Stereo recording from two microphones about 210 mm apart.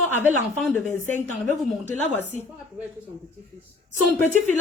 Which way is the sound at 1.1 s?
35° right (ahead or behind).